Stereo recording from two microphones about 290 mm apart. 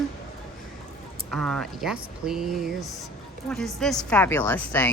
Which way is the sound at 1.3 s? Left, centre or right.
Centre.